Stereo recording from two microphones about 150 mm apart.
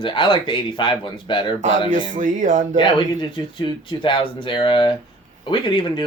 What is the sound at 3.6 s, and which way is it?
Speech, 35° left (ahead or behind).